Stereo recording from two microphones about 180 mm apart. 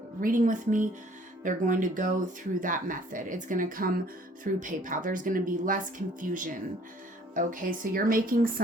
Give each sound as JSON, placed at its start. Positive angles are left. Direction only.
{"t": 0.2, "sound": "speech", "side_deg": -45}